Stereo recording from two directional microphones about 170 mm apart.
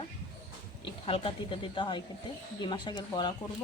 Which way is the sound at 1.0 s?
30° left (ahead or behind).